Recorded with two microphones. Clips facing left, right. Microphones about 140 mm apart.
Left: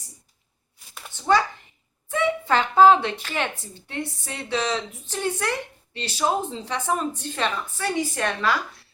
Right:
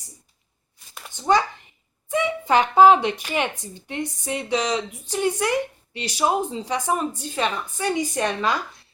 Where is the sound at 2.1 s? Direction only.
15° right (ahead or behind).